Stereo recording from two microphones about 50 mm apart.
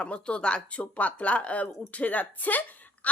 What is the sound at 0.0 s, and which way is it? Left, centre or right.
Speech, left.